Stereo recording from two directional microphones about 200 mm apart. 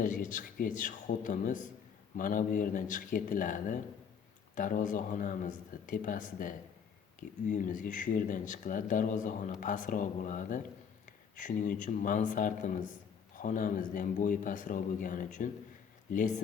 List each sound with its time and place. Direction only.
0.0 s a man's voice: 40° left (ahead or behind)